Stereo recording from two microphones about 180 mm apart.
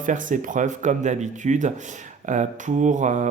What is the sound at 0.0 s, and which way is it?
Speech, 45° right (ahead or behind).